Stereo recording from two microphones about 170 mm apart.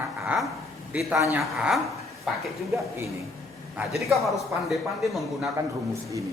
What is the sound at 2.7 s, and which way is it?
Speech, 15° right (ahead or behind).